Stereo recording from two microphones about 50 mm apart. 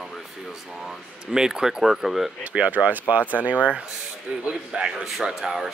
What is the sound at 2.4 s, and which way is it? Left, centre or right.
Speech, right.